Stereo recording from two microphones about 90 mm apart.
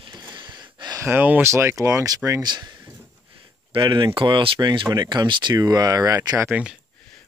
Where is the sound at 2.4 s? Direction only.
50° right (ahead or behind).